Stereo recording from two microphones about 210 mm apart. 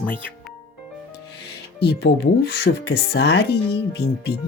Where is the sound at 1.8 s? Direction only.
50° left (ahead or behind).